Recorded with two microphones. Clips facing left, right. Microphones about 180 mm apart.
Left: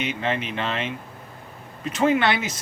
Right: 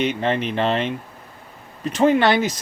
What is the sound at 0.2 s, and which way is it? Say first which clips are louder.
Speech: right 5 dB; 35° right (ahead or behind).